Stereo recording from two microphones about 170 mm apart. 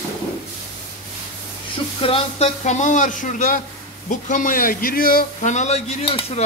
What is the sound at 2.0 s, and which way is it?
A man's voice, 35° left (ahead or behind).